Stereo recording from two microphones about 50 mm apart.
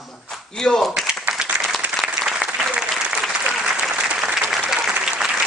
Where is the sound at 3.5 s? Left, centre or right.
Centre.